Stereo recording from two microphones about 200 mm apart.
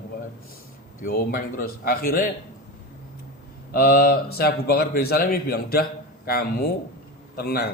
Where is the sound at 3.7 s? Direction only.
50° left (ahead or behind).